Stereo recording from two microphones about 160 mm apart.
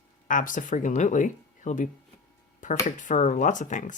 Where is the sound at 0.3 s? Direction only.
55° left (ahead or behind).